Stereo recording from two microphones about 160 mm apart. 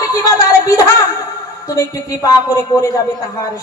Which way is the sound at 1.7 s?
20° left (ahead or behind).